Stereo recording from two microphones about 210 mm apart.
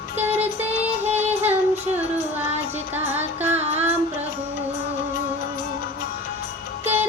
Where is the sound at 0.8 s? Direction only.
30° right (ahead or behind).